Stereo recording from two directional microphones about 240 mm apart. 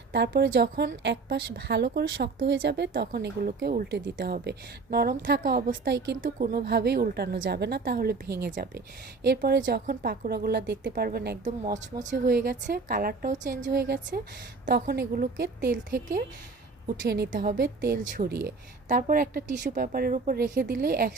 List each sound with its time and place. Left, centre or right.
0.1 s a woman's voice: right
11.6 s a woman's voice: right
13.7 s a woman's voice: right